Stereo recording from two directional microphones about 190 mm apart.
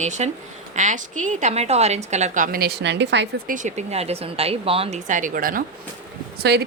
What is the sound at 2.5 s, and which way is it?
Speech, 60° right (ahead or behind).